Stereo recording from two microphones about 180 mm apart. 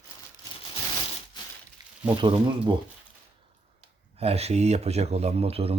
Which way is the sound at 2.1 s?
25° right (ahead or behind).